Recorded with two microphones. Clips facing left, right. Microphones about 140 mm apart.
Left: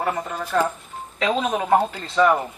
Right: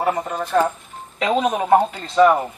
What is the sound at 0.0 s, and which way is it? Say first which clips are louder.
Speech: right 4 dB; 15° right (ahead or behind).